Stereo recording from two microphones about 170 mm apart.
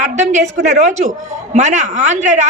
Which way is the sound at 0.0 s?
45° right (ahead or behind).